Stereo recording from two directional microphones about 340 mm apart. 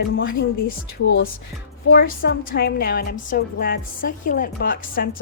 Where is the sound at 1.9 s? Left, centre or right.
Left.